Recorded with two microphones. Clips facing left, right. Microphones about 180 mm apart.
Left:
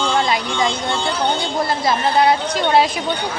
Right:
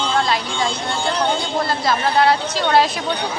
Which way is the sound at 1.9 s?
15° left (ahead or behind).